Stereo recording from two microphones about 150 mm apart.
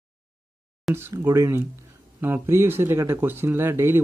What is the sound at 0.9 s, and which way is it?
Speech, 20° right (ahead or behind).